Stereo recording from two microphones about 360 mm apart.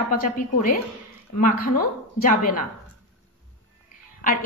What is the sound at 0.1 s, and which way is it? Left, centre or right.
A woman's voice, left.